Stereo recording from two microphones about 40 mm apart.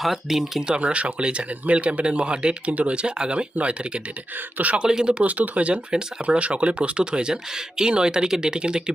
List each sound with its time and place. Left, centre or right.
0.0 s speech: centre
0.7 s speech: right
2.6 s speech: right
4.5 s speech: right
4.8 s speech: centre
5.2 s speech: right
5.9 s speech: right
6.2 s speech: right